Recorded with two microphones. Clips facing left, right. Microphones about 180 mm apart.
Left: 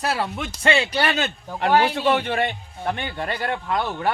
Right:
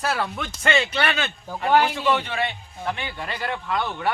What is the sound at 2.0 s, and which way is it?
A man's voice, 55° left (ahead or behind).